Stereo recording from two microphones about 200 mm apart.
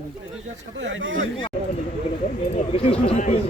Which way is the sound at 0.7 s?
70° right (ahead or behind).